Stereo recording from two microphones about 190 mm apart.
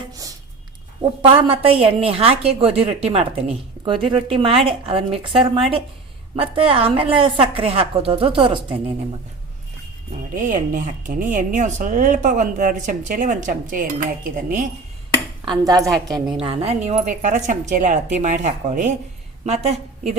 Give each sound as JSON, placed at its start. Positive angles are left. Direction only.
{"t": 1.2, "sound": "a woman's voice", "side_deg": -30}
{"t": 10.3, "sound": "speech", "side_deg": -45}
{"t": 15.4, "sound": "a woman's voice", "side_deg": -20}